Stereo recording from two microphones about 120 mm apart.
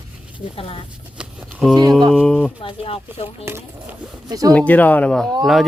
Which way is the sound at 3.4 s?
20° right (ahead or behind).